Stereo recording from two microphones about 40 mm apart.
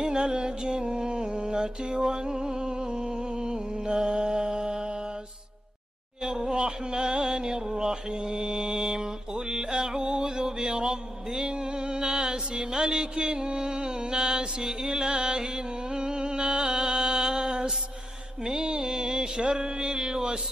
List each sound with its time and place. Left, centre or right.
0.0 s music: centre
6.2 s music: centre
18.4 s mantra: centre